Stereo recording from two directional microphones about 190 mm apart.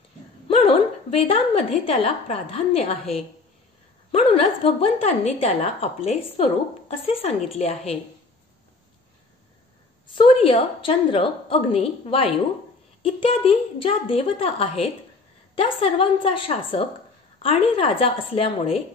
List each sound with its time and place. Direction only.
0.5 s a woman's voice: 30° left (ahead or behind)
4.1 s a woman's voice: 30° left (ahead or behind)
10.0 s a woman's voice: 25° left (ahead or behind)